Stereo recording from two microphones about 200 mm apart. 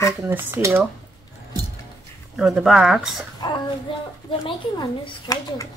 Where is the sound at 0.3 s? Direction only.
10° right (ahead or behind).